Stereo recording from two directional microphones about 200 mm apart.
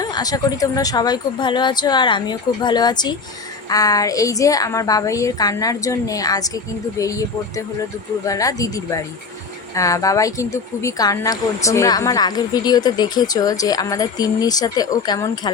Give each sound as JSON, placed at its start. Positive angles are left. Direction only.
{"t": 0.0, "sound": "speech", "side_deg": 20}